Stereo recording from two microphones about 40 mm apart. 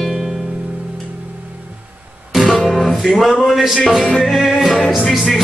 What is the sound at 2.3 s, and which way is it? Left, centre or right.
Music, centre.